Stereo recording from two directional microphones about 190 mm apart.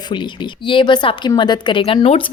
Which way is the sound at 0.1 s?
25° left (ahead or behind).